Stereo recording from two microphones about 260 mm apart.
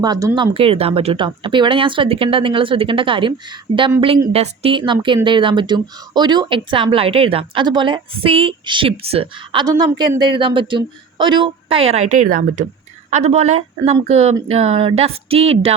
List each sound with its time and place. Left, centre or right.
0.0 s speech: centre